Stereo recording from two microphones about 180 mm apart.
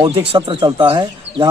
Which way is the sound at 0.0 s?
30° right (ahead or behind).